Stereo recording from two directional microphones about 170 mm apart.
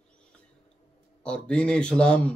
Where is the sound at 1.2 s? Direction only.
5° left (ahead or behind).